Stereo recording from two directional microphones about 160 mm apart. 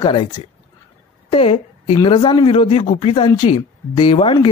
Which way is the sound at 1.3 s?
35° left (ahead or behind).